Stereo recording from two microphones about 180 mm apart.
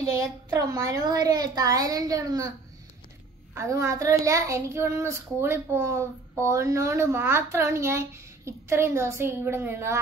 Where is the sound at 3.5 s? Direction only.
15° right (ahead or behind).